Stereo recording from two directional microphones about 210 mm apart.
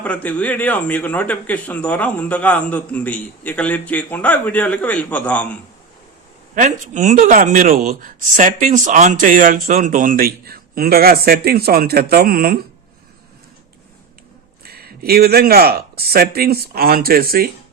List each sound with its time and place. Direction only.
0.0 s a man's voice: 5° left (ahead or behind)
6.6 s speech: 35° right (ahead or behind)
14.6 s speech: 45° right (ahead or behind)